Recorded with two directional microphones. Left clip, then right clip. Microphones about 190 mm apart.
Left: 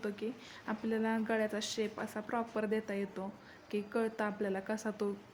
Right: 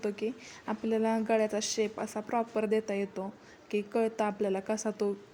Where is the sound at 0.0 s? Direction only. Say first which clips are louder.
Right 6 dB; 15° right (ahead or behind).